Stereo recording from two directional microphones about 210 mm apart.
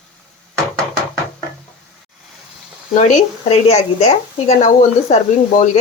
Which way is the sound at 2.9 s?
30° left (ahead or behind).